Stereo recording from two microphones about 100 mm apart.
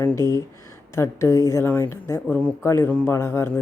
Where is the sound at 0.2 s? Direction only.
30° left (ahead or behind).